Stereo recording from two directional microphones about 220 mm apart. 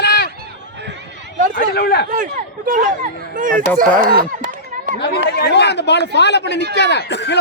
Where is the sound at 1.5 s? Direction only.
45° left (ahead or behind).